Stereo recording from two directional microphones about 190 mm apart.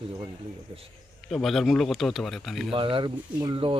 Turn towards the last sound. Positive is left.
turn(degrees=-25)  # may be behind; listen again after turning